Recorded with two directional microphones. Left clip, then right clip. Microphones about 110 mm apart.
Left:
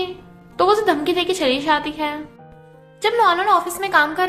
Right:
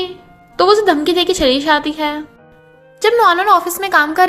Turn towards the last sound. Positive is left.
turn(degrees=-70)  # may be behind; listen again after turning